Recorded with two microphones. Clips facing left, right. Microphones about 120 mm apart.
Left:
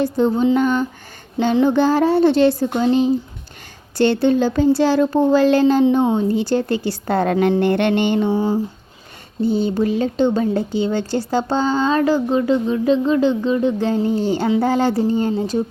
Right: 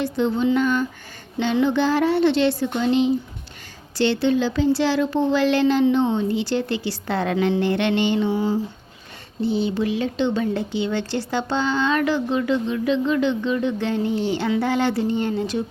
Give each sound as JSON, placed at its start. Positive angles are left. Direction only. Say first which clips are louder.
{"t": 0.0, "sound": "a woman's voice", "louder": "left 4 dB", "side_deg": 40}